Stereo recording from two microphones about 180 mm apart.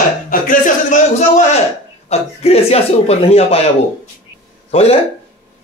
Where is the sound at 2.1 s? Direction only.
35° left (ahead or behind).